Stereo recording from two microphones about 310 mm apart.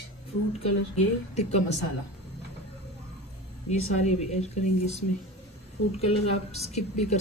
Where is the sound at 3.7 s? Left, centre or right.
Left.